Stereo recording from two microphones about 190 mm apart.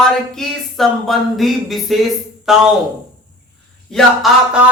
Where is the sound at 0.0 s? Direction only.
Centre (ahead or behind).